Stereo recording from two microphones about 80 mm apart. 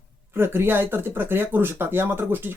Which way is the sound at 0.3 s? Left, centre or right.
Right.